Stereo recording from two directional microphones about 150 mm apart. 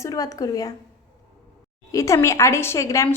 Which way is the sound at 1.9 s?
20° left (ahead or behind).